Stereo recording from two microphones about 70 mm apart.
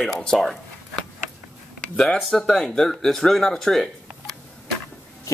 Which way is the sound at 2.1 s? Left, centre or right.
Centre.